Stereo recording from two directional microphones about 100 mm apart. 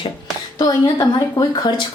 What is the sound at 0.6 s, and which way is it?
Speech, 40° left (ahead or behind).